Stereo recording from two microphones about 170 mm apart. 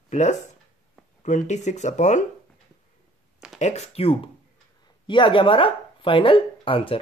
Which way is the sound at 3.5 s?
40° left (ahead or behind).